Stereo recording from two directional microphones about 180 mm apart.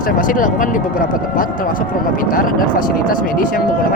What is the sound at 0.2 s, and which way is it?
Speech, 45° left (ahead or behind).